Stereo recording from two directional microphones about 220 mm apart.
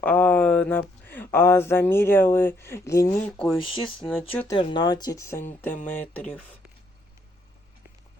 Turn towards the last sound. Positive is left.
turn(degrees=5)  # may be behind; listen again after turning